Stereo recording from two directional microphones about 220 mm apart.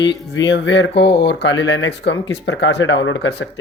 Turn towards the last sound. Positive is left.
turn(degrees=55)  # may be behind; listen again after turning